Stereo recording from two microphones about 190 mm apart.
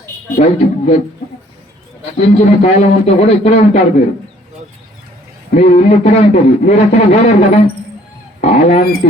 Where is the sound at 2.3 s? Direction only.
30° left (ahead or behind).